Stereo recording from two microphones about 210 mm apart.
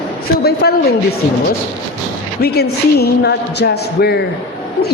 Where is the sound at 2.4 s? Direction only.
50° left (ahead or behind).